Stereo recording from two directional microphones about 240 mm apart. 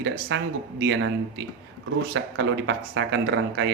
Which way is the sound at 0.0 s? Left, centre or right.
Right.